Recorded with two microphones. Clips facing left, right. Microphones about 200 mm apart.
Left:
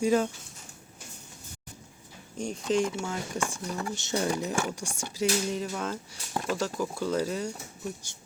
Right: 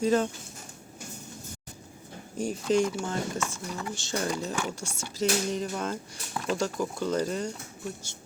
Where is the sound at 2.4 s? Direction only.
5° right (ahead or behind).